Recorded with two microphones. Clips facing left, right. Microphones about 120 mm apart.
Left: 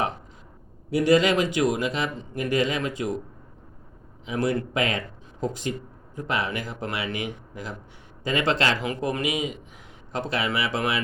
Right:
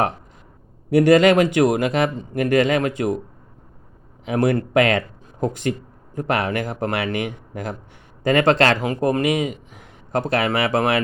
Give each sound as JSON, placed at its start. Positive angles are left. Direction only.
{"t": 0.9, "sound": "speech", "side_deg": -55}
{"t": 4.3, "sound": "speech", "side_deg": -60}
{"t": 8.8, "sound": "a man's voice", "side_deg": -45}